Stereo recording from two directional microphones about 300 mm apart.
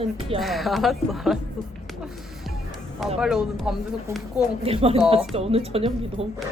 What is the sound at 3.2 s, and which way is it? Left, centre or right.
Speech, centre.